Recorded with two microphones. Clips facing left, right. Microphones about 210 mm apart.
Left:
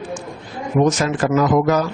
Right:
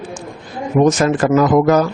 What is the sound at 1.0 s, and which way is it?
Speech, 50° right (ahead or behind).